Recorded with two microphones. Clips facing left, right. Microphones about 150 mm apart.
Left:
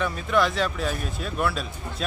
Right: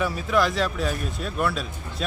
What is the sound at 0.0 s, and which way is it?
Speech, centre (ahead or behind).